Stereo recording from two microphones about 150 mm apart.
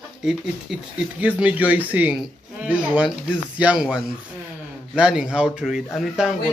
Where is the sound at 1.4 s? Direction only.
10° right (ahead or behind).